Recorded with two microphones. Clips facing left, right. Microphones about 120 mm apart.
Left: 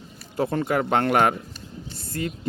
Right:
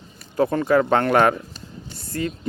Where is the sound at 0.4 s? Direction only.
45° right (ahead or behind).